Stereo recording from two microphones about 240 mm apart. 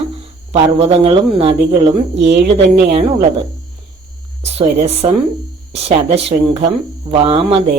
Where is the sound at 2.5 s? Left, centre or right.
Right.